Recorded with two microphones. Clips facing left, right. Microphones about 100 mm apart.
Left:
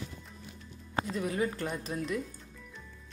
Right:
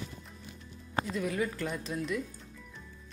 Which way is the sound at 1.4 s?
35° left (ahead or behind).